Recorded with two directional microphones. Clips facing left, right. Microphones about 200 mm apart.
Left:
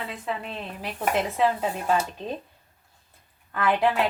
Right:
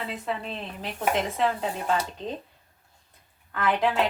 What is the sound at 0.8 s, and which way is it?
Speech, 10° left (ahead or behind).